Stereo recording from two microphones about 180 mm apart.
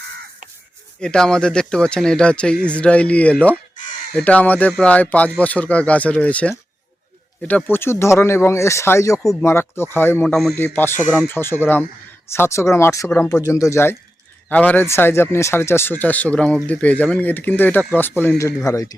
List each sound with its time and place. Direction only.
0.9 s speech: 5° left (ahead or behind)